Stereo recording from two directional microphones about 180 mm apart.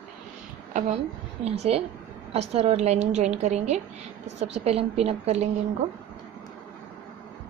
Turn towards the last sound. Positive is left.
turn(degrees=-35)  # may be behind; listen again after turning